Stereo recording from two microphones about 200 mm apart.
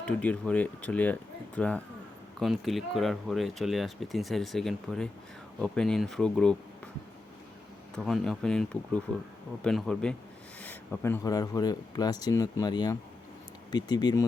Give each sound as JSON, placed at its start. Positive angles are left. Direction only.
{"t": 0.0, "sound": "speech", "side_deg": 5}
{"t": 7.9, "sound": "speech", "side_deg": 0}